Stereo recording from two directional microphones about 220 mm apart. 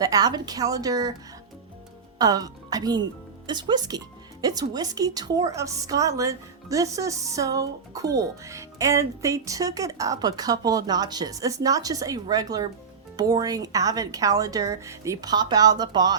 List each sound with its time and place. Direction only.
0.0 s speech: 15° right (ahead or behind)
2.1 s speech: 15° right (ahead or behind)